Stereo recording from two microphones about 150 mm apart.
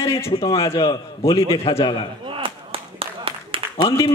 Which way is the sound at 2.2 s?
35° right (ahead or behind).